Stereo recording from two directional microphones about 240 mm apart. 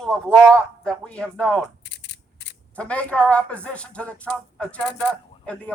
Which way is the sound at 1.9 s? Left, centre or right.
Left.